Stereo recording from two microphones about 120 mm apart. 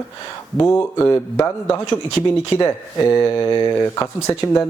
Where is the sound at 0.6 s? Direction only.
15° left (ahead or behind).